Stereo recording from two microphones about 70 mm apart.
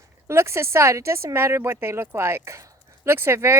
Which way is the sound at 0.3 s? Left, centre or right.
Right.